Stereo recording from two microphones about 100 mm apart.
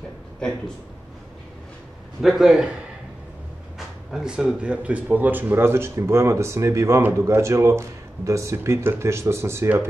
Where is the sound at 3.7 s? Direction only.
5° right (ahead or behind).